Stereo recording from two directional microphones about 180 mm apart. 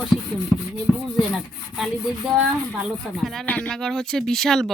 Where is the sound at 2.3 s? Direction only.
Centre (ahead or behind).